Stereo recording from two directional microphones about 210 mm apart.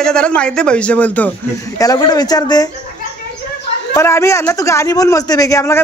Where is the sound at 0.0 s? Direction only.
5° left (ahead or behind).